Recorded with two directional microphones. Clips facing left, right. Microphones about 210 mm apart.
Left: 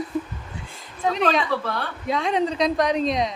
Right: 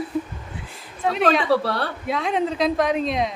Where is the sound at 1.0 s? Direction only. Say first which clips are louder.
Even; centre (ahead or behind).